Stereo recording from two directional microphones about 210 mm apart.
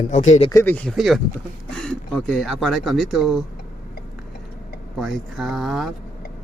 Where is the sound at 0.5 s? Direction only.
10° left (ahead or behind).